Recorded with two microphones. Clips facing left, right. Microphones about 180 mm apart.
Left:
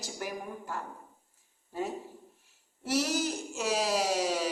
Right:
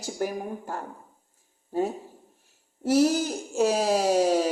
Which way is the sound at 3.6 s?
50° right (ahead or behind).